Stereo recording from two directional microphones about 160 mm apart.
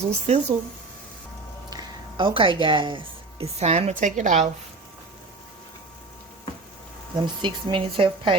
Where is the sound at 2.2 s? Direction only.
30° right (ahead or behind); by 4.5 s 50° right (ahead or behind).